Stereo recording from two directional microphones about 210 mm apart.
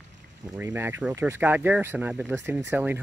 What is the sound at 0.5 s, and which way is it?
Speech, 10° right (ahead or behind).